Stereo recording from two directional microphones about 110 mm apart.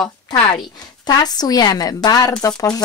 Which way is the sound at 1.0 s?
35° left (ahead or behind).